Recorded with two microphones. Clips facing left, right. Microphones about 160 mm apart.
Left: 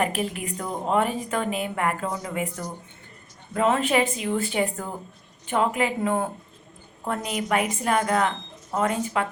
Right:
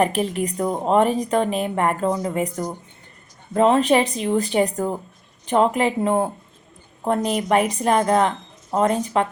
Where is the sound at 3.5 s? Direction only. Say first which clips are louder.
Right 5 dB; 30° right (ahead or behind).